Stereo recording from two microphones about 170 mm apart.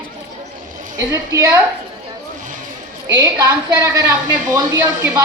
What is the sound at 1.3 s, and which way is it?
Speech, 20° right (ahead or behind).